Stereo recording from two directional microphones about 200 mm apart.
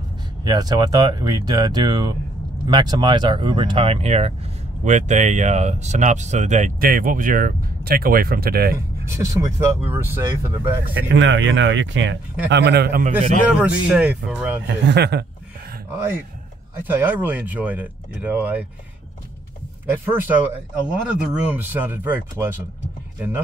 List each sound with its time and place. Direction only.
0.4 s speech: 20° right (ahead or behind); by 8.7 s 50° right (ahead or behind)
8.7 s speech: 15° right (ahead or behind)
11.1 s speech: 65° right (ahead or behind); by 13.1 s 50° right (ahead or behind)
13.1 s speech: 5° right (ahead or behind)
14.9 s speech: 55° right (ahead or behind)
16.8 s speech: 10° right (ahead or behind)
19.9 s speech: 10° right (ahead or behind)